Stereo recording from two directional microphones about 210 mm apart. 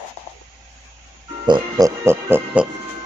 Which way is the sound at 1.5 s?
20° right (ahead or behind).